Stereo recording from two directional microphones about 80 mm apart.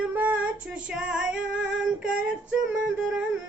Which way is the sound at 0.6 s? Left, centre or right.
Centre.